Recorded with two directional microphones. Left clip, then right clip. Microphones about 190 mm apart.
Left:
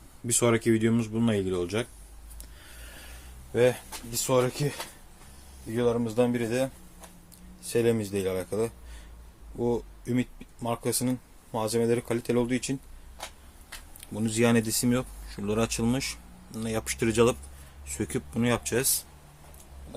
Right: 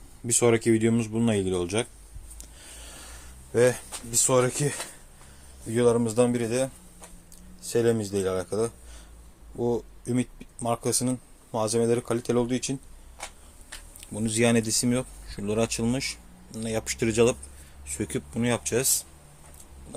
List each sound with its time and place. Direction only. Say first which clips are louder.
0.3 s speech: right 3 dB; centre (ahead or behind)
2.4 s a sound: right 3 dB; 10° right (ahead or behind)
5.7 s speech: right 4 dB; 35° right (ahead or behind)
6.2 s speech: right 2 dB; 15° right (ahead or behind)
7.7 s speech: right 2 dB; 5° right (ahead or behind)
14.0 s speech: right 1 dB; centre (ahead or behind)